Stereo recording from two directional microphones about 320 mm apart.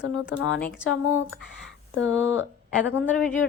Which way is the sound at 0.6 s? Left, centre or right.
Centre.